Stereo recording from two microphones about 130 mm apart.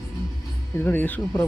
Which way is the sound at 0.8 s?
15° left (ahead or behind).